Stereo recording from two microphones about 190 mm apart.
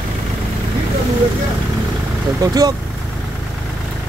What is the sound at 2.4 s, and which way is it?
Speech, 20° right (ahead or behind).